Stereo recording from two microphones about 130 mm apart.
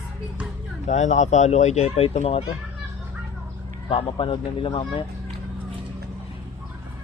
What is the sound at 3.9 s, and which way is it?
Speech, 45° left (ahead or behind).